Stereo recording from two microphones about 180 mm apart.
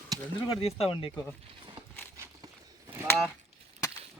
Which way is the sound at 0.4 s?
30° left (ahead or behind).